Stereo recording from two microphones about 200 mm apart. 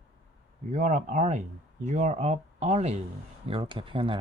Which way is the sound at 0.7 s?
40° right (ahead or behind).